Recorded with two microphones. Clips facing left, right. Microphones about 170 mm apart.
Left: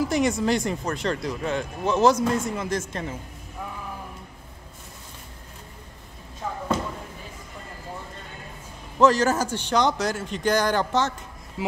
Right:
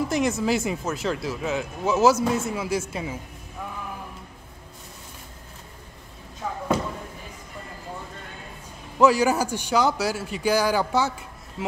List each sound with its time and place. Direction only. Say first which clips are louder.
0.0 s speech: left 1 dB; centre (ahead or behind)
8.9 s a man's voice: even; 10° right (ahead or behind)